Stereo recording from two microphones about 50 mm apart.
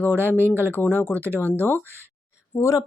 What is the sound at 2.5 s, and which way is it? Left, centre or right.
Speech, left.